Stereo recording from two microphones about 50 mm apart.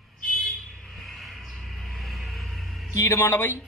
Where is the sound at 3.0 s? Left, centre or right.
Left.